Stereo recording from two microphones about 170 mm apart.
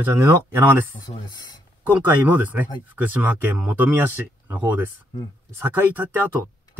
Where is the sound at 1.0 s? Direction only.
25° left (ahead or behind).